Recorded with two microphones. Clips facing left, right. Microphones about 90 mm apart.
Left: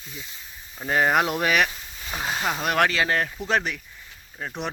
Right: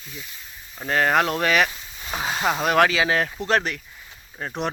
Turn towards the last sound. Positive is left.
turn(degrees=0)  # may be behind; listen again after turning